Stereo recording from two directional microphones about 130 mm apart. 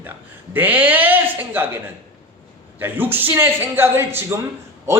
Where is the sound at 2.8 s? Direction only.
15° right (ahead or behind).